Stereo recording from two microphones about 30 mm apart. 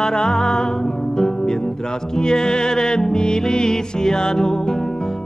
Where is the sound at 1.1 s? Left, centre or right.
Left.